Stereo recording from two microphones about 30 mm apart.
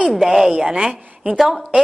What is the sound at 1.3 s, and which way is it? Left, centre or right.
Speech, centre.